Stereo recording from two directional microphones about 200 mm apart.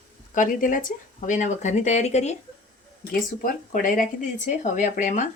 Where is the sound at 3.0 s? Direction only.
45° left (ahead or behind).